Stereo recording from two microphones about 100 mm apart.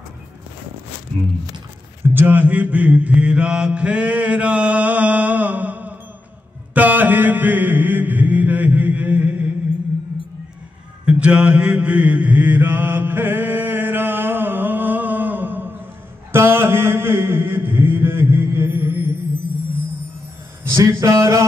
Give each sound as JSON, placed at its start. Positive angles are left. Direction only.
{"t": 2.0, "sound": "mantra", "side_deg": -20}
{"t": 11.1, "sound": "mantra", "side_deg": -10}
{"t": 20.6, "sound": "a man's voice", "side_deg": -30}
{"t": 21.0, "sound": "a sound", "side_deg": -30}